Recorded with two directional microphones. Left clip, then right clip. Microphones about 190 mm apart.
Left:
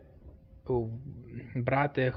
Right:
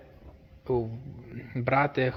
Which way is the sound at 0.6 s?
15° right (ahead or behind).